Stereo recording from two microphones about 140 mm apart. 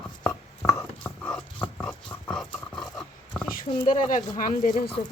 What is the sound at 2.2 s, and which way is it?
Dog, 5° left (ahead or behind).